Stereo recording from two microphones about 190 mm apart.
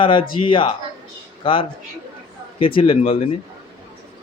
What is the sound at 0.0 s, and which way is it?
Speech, 25° left (ahead or behind).